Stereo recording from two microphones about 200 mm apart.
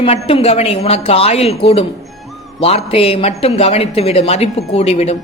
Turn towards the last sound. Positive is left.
turn(degrees=30)  # may be behind; listen again after turning